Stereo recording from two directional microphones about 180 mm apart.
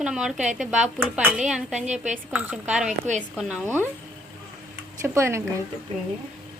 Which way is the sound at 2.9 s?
40° right (ahead or behind).